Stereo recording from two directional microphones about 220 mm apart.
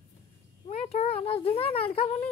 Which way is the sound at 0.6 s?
25° left (ahead or behind).